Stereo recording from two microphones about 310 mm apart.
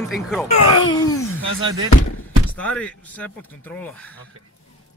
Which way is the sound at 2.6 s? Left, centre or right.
Centre.